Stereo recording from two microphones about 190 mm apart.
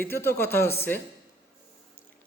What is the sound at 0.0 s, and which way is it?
Speech, 10° left (ahead or behind).